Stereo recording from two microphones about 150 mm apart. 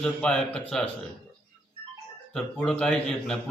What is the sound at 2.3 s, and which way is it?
A man's voice, 5° left (ahead or behind).